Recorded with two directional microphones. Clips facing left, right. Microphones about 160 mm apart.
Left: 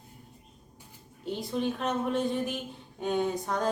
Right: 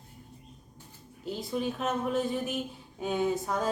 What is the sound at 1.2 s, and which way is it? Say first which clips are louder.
Speech: left 1 dB; centre (ahead or behind).